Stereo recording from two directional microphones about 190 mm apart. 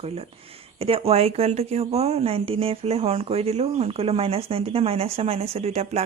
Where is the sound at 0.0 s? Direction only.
30° right (ahead or behind).